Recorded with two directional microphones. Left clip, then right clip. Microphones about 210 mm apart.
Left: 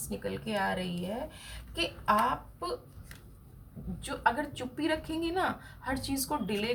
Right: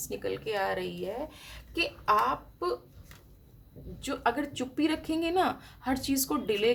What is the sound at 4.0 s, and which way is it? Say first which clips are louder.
A woman's voice: even; 45° right (ahead or behind).